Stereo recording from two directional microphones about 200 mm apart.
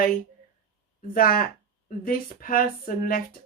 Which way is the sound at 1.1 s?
45° left (ahead or behind).